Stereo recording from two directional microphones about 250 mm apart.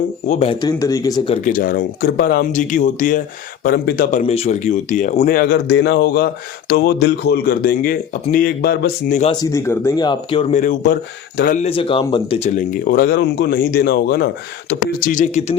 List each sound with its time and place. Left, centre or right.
0.3 s speech: left
1.5 s speech: left
9.3 s speech: centre; by 15.5 s left